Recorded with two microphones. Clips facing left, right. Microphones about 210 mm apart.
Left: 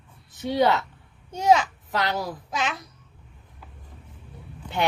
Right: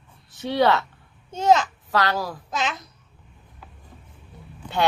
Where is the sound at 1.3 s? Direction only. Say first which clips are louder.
Right 1 dB; 10° left (ahead or behind).